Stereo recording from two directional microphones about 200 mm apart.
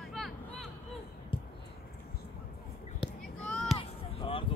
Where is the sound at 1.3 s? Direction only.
25° left (ahead or behind).